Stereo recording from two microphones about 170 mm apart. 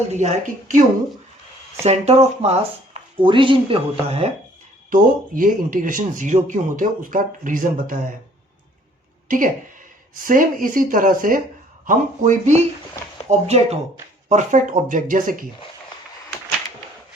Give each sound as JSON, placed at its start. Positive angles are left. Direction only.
{"t": 0.1, "sound": "speech", "side_deg": -40}
{"t": 1.8, "sound": "speech", "side_deg": -40}
{"t": 4.9, "sound": "speech", "side_deg": -55}
{"t": 10.2, "sound": "speech", "side_deg": -55}